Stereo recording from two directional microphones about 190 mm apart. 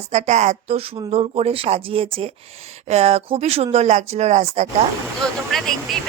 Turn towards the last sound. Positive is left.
turn(degrees=0)  # may be behind; listen again after turning